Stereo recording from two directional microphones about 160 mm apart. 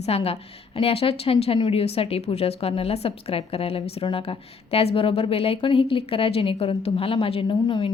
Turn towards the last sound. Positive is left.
turn(degrees=35)  # may be behind; listen again after turning